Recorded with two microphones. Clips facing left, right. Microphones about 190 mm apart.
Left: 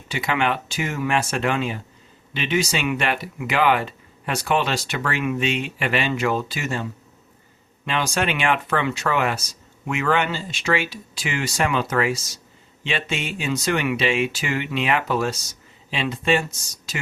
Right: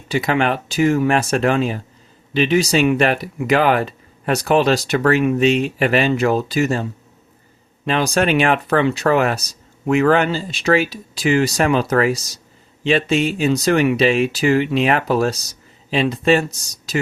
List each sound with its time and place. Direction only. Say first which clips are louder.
0.1 s speech: right 5 dB; 35° right (ahead or behind)
7.9 s speech: right 6 dB; 40° right (ahead or behind)